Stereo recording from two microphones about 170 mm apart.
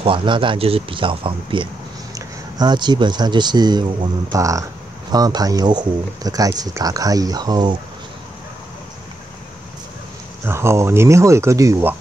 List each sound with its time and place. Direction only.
0.0 s speech: 30° right (ahead or behind)
10.4 s speech: 15° right (ahead or behind)